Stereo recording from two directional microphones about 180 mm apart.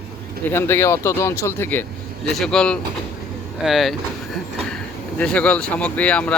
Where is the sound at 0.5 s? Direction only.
15° left (ahead or behind).